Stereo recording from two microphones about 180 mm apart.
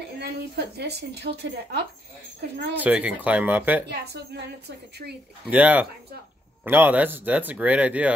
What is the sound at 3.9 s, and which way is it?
A woman's voice, 65° right (ahead or behind).